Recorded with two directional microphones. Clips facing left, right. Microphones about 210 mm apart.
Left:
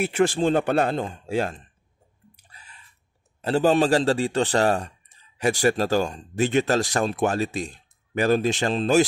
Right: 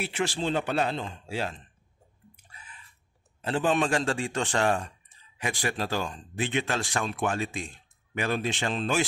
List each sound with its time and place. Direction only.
0.0 s speech: 50° left (ahead or behind)
2.5 s a sound: 40° left (ahead or behind)
3.4 s speech: 40° left (ahead or behind)